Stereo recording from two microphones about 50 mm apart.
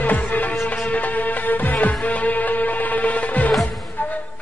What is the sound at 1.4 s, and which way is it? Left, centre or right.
Music, left.